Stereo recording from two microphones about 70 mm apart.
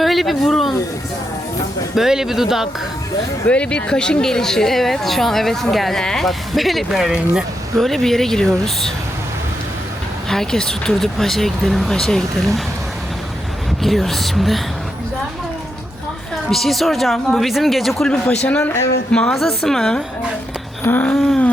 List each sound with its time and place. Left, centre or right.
0.0 s speech: centre
2.0 s speech: centre
3.4 s speech: centre
7.8 s speech: centre
10.2 s speech: centre
13.8 s speech: centre
16.5 s speech: centre
19.1 s a woman's voice: centre
20.8 s a sound: left
21.1 s speech: centre